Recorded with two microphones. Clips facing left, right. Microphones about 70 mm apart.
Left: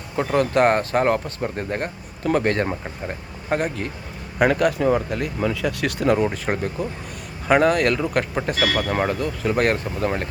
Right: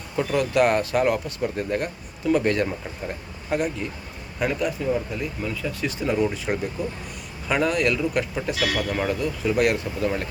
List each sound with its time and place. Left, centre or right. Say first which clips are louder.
0.2 s speech: left 2 dB; left
4.4 s speech: left 7 dB; left
5.4 s speech: left 7 dB; left
6.3 s speech: left 2 dB; left